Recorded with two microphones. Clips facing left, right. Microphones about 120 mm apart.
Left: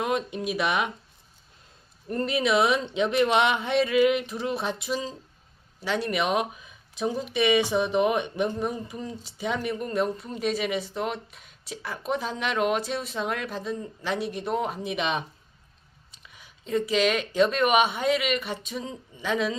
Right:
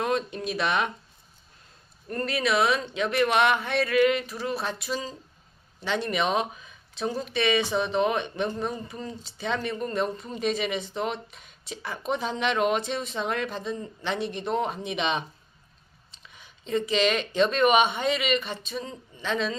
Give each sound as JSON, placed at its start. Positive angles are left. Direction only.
{"t": 0.0, "sound": "speech", "side_deg": 15}
{"t": 2.0, "sound": "speech", "side_deg": 15}